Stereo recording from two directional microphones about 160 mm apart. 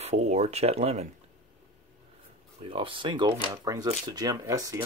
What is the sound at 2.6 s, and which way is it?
Speech, 35° right (ahead or behind).